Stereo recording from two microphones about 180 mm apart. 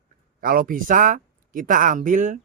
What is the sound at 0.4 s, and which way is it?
Speech, 55° right (ahead or behind).